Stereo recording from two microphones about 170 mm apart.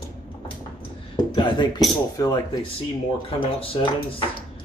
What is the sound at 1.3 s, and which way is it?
Speech, 25° left (ahead or behind).